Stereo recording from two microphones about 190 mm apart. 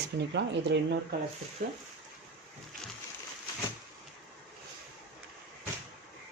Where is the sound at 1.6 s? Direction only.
50° right (ahead or behind).